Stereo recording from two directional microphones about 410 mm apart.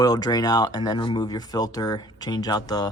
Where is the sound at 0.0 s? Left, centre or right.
Centre.